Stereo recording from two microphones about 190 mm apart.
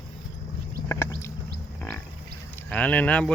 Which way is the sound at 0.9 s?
15° left (ahead or behind).